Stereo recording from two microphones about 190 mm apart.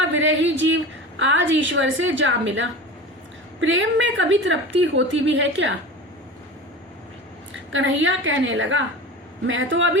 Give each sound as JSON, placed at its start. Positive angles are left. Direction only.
{"t": 0.2, "sound": "a woman's voice", "side_deg": -80}
{"t": 3.6, "sound": "a woman's voice", "side_deg": -90}
{"t": 7.7, "sound": "a woman's voice", "side_deg": -85}